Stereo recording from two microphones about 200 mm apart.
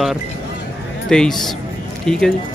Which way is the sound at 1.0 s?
Centre (ahead or behind).